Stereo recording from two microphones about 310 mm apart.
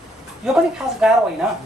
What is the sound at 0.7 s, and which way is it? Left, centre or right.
Speech, centre.